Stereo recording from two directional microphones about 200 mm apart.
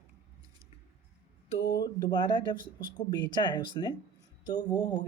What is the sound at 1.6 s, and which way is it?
Speech, 20° left (ahead or behind).